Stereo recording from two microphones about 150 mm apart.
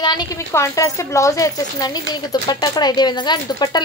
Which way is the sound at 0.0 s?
30° left (ahead or behind).